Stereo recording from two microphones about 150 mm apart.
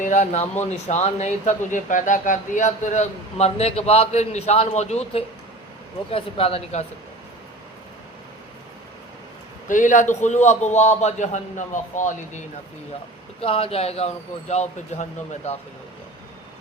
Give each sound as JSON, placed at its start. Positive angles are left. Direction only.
{"t": 0.0, "sound": "speech", "side_deg": 55}
{"t": 9.6, "sound": "speech", "side_deg": 60}
{"t": 13.4, "sound": "speech", "side_deg": 40}